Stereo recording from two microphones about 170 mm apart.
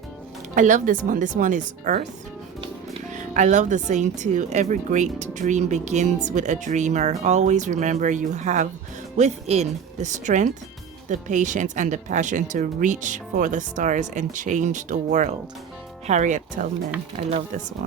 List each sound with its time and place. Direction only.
0.5 s speech: 45° right (ahead or behind)
3.1 s speech: 45° right (ahead or behind)